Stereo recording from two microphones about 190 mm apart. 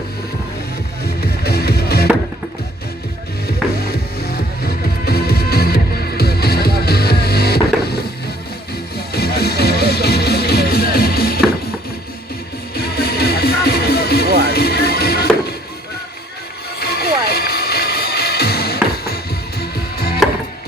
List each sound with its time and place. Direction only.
1.0 s music: 55° left (ahead or behind)
3.4 s music: 55° left (ahead or behind)
9.1 s music: 55° left (ahead or behind)
12.7 s music: 55° left (ahead or behind)
16.8 s music: 55° left (ahead or behind)